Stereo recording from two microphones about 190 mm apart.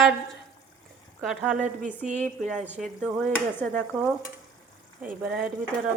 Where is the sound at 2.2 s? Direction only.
5° left (ahead or behind).